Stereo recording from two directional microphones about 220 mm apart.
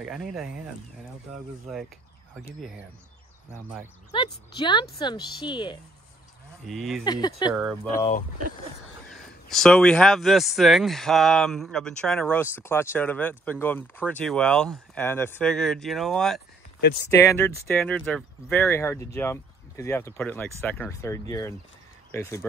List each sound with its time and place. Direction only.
0.0 s speech: centre (ahead or behind)
1.7 s speech: centre (ahead or behind)
4.1 s a woman's voice: 20° left (ahead or behind)
6.7 s speech: centre (ahead or behind)
7.1 s speech: 20° left (ahead or behind)
9.0 s speech: centre (ahead or behind)
17.1 s speech: 10° left (ahead or behind)